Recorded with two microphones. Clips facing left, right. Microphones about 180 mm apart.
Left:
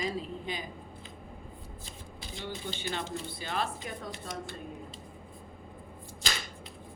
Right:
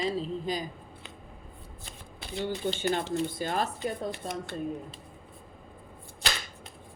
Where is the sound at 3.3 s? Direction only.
45° right (ahead or behind).